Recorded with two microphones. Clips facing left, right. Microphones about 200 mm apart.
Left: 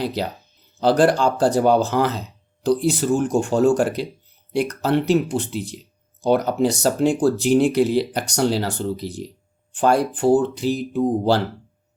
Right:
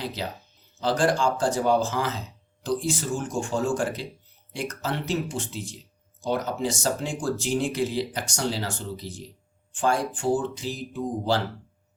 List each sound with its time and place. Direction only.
0.0 s speech: 70° left (ahead or behind)